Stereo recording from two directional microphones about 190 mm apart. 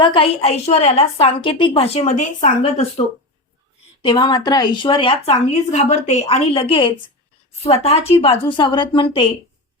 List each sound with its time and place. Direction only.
0.0 s a woman's voice: 30° left (ahead or behind)
4.0 s a woman's voice: 25° left (ahead or behind)